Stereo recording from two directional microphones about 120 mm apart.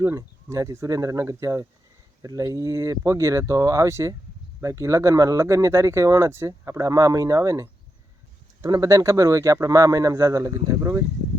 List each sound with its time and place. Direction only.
0.0 s speech: 25° right (ahead or behind)